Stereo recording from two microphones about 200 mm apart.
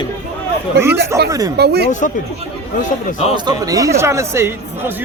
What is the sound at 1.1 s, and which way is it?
Speech, 15° right (ahead or behind).